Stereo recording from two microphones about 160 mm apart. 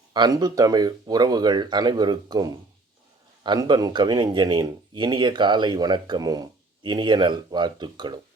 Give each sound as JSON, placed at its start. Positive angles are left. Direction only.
{"t": 0.1, "sound": "speech", "side_deg": -25}